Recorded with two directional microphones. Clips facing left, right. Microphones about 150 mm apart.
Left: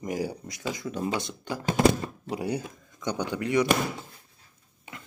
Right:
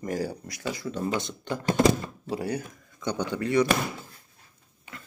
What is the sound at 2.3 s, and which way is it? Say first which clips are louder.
Speech: right 1 dB; 15° left (ahead or behind).